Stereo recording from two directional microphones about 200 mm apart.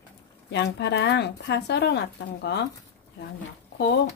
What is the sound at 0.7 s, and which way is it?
Speech, 60° left (ahead or behind).